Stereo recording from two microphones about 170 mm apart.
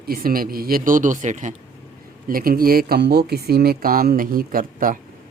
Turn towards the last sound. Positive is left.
turn(degrees=-55)  # may be behind; listen again after turning